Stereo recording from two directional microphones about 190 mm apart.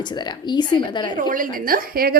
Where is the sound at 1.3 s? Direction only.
45° right (ahead or behind).